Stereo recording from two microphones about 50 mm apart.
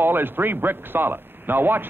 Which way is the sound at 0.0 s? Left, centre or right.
Right.